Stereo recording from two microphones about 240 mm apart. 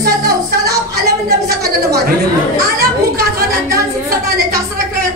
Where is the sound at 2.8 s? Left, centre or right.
Right.